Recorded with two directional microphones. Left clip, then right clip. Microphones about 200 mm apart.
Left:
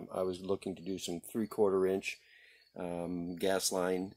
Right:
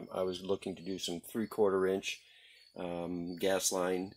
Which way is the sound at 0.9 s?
30° left (ahead or behind).